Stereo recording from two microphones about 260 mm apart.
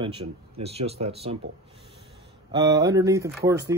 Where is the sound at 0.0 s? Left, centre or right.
Right.